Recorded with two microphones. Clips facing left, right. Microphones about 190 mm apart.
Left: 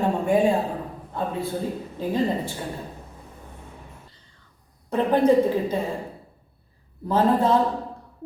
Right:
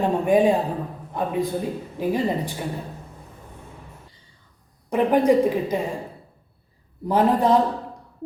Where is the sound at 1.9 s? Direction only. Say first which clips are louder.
Right 1 dB; 15° right (ahead or behind).